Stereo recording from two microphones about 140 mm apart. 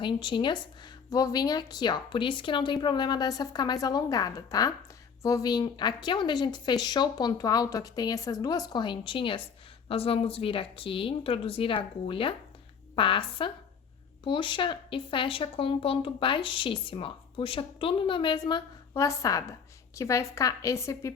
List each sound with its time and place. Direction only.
0.0 s a woman's voice: 35° left (ahead or behind)
18.9 s a woman's voice: 20° left (ahead or behind)